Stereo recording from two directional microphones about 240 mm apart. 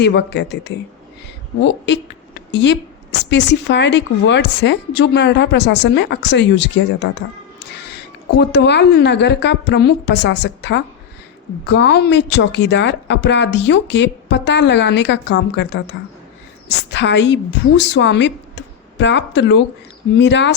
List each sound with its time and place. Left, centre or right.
0.0 s a woman's voice: left
8.4 s a woman's voice: left